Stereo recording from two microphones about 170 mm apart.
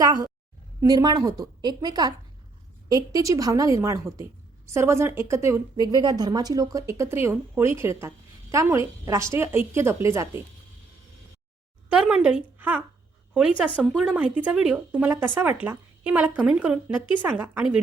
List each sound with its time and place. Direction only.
0.0 s a woman's voice: 20° right (ahead or behind)
11.9 s speech: 5° right (ahead or behind)
13.8 s a woman's voice: 5° right (ahead or behind)